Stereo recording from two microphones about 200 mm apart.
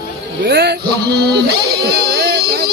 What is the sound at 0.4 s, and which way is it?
Speech, 55° right (ahead or behind).